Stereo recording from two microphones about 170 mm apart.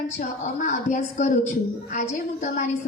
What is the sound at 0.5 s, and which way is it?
A woman's voice, 45° left (ahead or behind).